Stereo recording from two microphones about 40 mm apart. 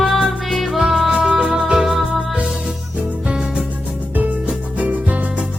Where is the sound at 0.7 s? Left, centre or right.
Centre.